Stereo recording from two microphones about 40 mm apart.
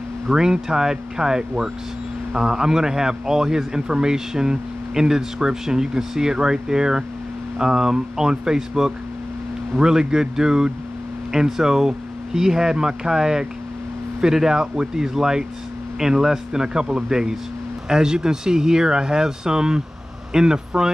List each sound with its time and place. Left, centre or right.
0.3 s a man's voice: centre